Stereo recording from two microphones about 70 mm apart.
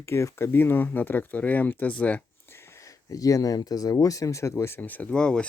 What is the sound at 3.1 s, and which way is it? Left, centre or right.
Speech, left.